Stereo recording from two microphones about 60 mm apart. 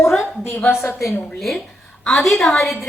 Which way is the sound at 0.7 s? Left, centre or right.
Left.